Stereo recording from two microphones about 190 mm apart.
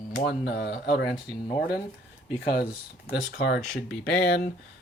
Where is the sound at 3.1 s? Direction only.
60° left (ahead or behind).